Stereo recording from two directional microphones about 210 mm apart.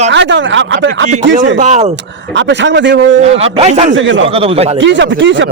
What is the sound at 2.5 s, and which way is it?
Speech, 55° right (ahead or behind).